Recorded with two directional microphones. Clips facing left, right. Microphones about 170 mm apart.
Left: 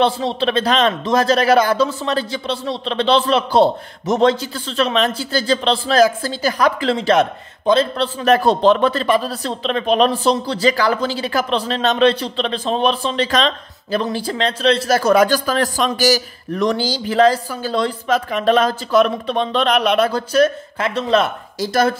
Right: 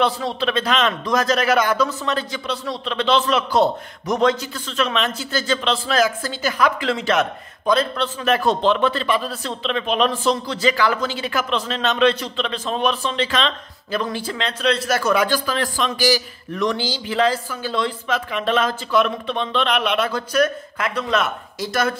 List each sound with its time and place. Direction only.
0.0 s a man's voice: 25° left (ahead or behind)